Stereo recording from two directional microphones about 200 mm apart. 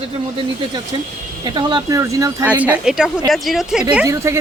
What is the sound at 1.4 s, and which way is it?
Speech, 20° right (ahead or behind).